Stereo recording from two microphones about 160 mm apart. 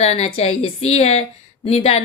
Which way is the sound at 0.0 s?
40° left (ahead or behind).